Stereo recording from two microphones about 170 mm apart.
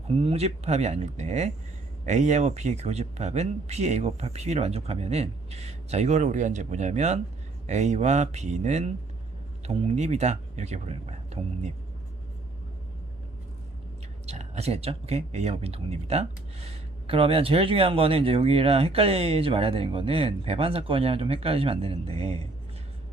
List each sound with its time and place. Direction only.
0.1 s speech: 35° right (ahead or behind)
14.3 s speech: 40° right (ahead or behind)